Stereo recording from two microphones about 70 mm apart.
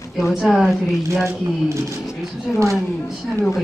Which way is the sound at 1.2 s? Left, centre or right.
Right.